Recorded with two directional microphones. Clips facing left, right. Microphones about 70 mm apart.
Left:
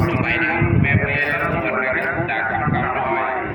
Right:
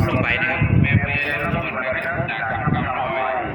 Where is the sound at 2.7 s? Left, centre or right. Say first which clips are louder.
Left 2 dB; left.